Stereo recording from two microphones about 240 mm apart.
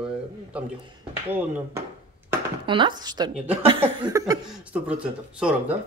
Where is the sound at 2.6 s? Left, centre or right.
Centre.